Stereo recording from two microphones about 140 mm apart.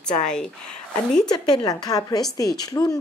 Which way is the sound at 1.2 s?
35° left (ahead or behind).